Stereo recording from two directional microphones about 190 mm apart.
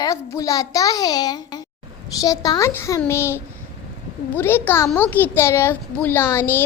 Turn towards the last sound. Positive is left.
turn(degrees=10)  # may be behind; listen again after turning